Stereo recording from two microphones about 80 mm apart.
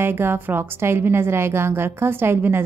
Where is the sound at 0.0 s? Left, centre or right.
Right.